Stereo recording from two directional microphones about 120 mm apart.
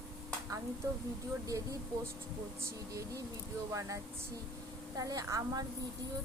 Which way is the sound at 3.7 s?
25° right (ahead or behind).